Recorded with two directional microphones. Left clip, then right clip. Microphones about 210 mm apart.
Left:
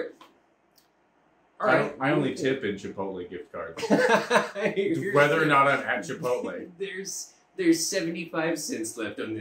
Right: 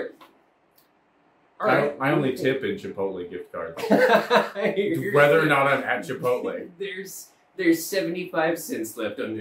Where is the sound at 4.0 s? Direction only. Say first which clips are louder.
Right 4 dB; 15° left (ahead or behind).